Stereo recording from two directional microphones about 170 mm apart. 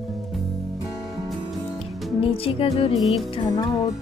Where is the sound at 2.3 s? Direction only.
35° left (ahead or behind).